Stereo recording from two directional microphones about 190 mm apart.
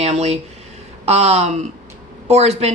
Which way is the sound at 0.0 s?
35° right (ahead or behind).